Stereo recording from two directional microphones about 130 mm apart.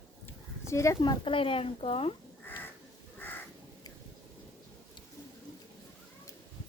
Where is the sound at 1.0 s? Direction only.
40° left (ahead or behind).